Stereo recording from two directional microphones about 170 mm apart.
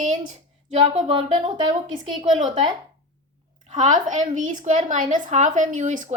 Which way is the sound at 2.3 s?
45° right (ahead or behind).